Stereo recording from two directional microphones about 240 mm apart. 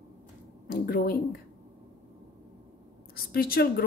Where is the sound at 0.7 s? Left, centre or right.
Left.